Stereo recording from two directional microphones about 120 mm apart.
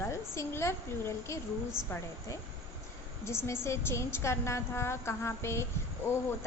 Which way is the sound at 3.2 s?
20° left (ahead or behind).